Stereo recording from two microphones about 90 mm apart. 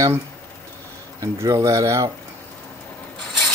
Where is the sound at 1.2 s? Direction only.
35° right (ahead or behind).